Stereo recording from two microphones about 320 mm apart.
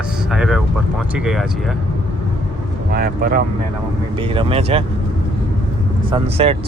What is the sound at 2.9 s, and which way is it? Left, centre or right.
Speech, right.